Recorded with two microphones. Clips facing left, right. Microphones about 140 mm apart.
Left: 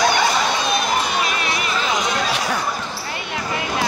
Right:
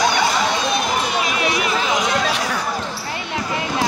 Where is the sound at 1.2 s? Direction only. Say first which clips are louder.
Right 2 dB; 15° right (ahead or behind).